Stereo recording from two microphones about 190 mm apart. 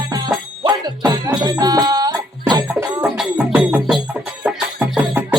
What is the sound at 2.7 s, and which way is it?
Music, 10° right (ahead or behind).